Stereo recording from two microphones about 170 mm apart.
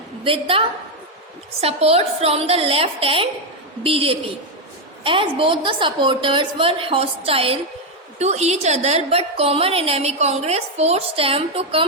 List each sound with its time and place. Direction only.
0.3 s a woman's voice: 30° right (ahead or behind)
1.6 s a woman's voice: 35° right (ahead or behind)